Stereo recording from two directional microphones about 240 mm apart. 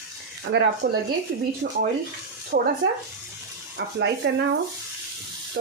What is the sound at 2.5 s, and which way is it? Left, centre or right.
Speech, right.